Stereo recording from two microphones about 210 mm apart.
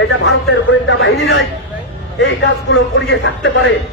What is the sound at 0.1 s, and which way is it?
A man's voice, 60° left (ahead or behind).